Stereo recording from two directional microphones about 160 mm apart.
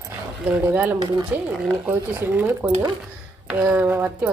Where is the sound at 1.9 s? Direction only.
15° right (ahead or behind).